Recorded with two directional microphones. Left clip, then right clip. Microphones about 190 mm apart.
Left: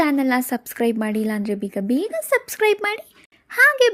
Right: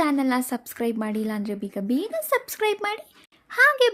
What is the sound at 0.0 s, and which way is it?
Speech, 15° left (ahead or behind).